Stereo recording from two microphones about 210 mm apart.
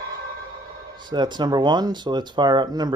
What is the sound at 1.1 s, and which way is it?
Speech, 20° right (ahead or behind).